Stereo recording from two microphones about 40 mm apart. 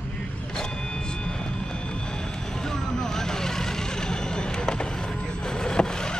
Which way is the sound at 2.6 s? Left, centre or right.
Centre.